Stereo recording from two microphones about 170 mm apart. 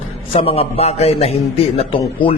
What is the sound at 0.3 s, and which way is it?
A man's voice, 35° left (ahead or behind).